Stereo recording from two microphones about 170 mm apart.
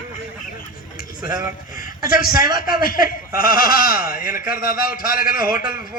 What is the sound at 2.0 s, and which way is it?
A man's voice, 55° left (ahead or behind).